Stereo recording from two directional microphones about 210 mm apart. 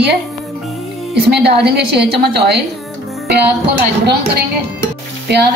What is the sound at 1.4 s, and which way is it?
A woman's voice, 50° right (ahead or behind).